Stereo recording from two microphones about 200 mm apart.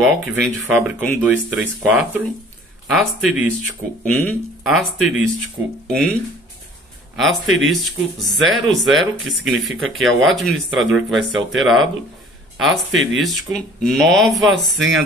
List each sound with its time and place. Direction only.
0.2 s speech: 5° right (ahead or behind)
7.2 s speech: centre (ahead or behind)
12.9 s speech: 65° right (ahead or behind)
13.2 s speech: centre (ahead or behind)